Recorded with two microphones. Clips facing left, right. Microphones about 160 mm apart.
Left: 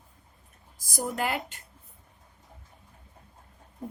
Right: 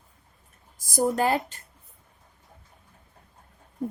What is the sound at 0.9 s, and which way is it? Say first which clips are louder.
Speech: right 7 dB; 40° right (ahead or behind).